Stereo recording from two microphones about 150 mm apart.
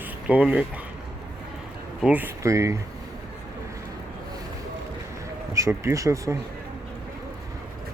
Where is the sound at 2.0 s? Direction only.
10° right (ahead or behind).